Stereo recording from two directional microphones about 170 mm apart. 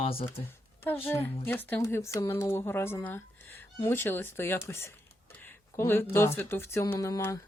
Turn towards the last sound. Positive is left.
turn(degrees=20)  # may be behind; listen again after turning